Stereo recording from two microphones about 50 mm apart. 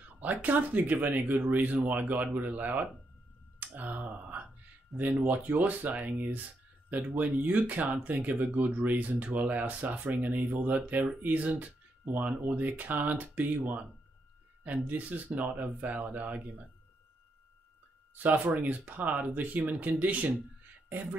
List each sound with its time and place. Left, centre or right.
0.2 s speech: right
3.5 s clicking: right
5.2 s speech: right
18.1 s speech: right